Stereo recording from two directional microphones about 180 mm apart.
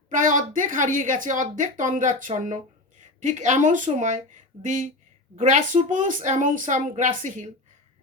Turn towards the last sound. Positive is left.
turn(degrees=-45)  # may be behind; listen again after turning